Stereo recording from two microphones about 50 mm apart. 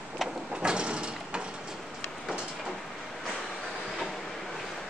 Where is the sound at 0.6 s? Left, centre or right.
Centre.